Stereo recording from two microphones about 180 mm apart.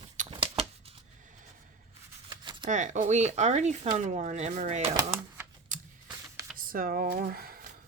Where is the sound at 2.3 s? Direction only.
25° right (ahead or behind).